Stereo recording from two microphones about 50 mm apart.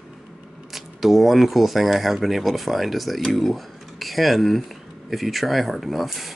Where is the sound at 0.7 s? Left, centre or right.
Centre.